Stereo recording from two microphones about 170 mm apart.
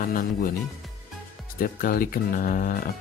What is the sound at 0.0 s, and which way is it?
Speech, 55° left (ahead or behind).